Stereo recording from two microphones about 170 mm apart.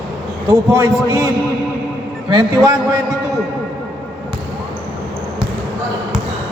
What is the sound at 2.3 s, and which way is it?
Speech, 25° right (ahead or behind).